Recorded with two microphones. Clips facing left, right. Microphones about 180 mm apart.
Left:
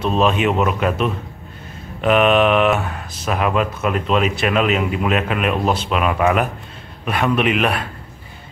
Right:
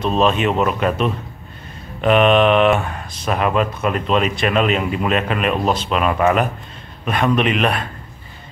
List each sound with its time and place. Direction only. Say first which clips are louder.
0.0 s speech: even; 5° left (ahead or behind)